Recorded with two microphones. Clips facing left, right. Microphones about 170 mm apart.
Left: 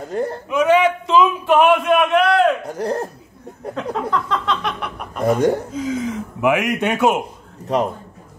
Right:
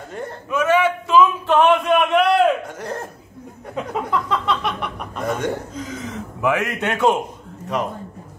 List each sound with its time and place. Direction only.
0.1 s speech: 40° left (ahead or behind)
0.5 s a sound: 15° left (ahead or behind); by 2.5 s centre (ahead or behind)
2.7 s speech: 35° left (ahead or behind)
3.9 s a sound: 5° right (ahead or behind)
5.2 s speech: 35° left (ahead or behind)
5.8 s speech: 10° left (ahead or behind)